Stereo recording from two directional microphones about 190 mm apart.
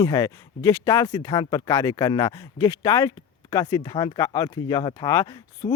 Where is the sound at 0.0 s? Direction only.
15° left (ahead or behind).